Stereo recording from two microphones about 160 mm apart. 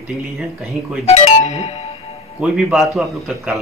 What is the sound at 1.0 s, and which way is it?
Speech, 40° left (ahead or behind).